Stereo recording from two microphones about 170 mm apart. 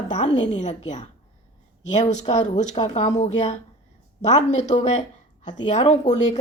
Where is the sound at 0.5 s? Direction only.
45° left (ahead or behind).